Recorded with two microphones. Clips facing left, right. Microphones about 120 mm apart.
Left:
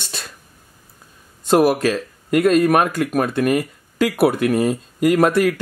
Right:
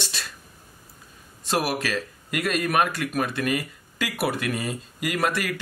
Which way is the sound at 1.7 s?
45° left (ahead or behind).